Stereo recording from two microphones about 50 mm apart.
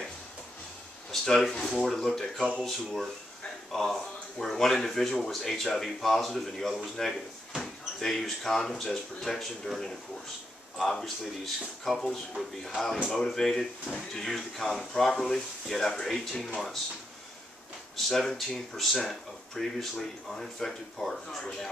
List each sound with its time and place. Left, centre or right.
1.2 s speech: centre
2.6 s speech: centre
17.9 s speech: centre